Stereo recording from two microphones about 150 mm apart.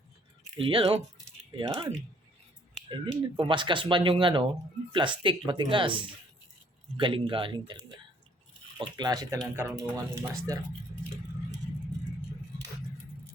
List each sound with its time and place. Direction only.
0.6 s speech: 40° right (ahead or behind)
1.6 s speech: 25° right (ahead or behind)
2.9 s speech: 35° right (ahead or behind)